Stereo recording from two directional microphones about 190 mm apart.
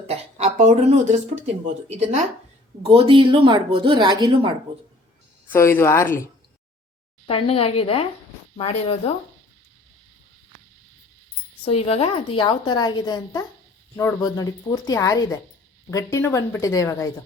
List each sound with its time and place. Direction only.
0.1 s speech: 35° right (ahead or behind)
5.5 s a woman's voice: 10° left (ahead or behind)
7.3 s a woman's voice: 30° left (ahead or behind)
11.6 s a woman's voice: 30° left (ahead or behind)